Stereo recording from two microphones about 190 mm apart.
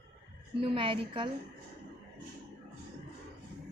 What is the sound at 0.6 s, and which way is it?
Speech, 30° right (ahead or behind).